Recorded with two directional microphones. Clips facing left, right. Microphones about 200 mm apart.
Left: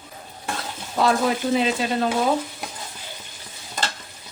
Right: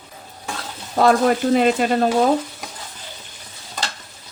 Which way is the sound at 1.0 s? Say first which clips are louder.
Right 5 dB; 50° right (ahead or behind).